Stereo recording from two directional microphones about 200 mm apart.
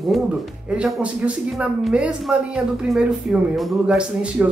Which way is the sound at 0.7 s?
5° right (ahead or behind).